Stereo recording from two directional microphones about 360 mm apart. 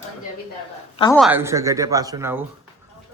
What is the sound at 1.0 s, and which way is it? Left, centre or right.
Speech, centre.